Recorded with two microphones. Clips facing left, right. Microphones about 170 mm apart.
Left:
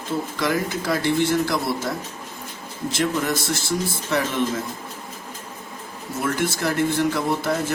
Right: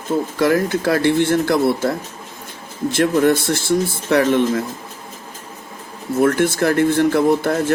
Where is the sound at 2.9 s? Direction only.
60° right (ahead or behind).